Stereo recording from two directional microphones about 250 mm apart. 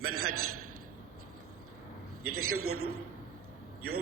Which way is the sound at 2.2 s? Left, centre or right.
Right.